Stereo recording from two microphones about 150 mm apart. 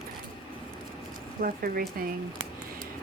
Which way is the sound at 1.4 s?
75° right (ahead or behind).